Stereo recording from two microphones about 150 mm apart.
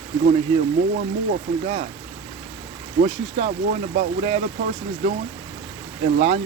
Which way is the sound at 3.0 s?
50° right (ahead or behind).